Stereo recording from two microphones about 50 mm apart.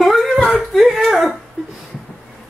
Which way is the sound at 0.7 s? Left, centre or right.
Centre.